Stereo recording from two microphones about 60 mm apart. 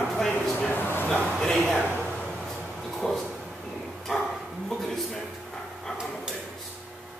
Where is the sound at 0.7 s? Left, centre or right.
Left.